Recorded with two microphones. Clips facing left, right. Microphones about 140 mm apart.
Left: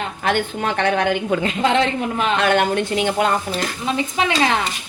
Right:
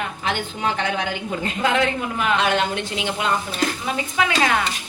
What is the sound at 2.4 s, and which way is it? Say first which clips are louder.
Speech: left 4 dB; 55° left (ahead or behind).